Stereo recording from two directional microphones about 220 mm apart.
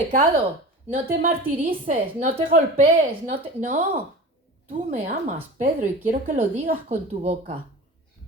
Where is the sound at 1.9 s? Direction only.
35° right (ahead or behind).